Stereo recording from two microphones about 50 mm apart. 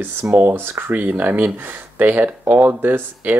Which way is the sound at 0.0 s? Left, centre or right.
Right.